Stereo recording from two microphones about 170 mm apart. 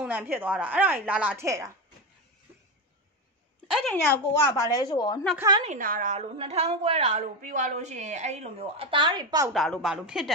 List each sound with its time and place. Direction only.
0.0 s a woman's voice: 10° right (ahead or behind)
3.7 s a woman's voice: 5° left (ahead or behind)
4.3 s a woman's voice: 20° left (ahead or behind)
5.8 s a woman's voice: 50° right (ahead or behind); by 9.5 s 25° right (ahead or behind)
9.5 s a woman's voice: centre (ahead or behind)